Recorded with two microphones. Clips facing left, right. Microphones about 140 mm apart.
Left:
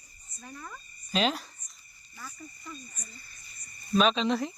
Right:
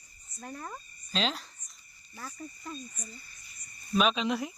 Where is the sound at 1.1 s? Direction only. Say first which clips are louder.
Left 4 dB; 5° left (ahead or behind).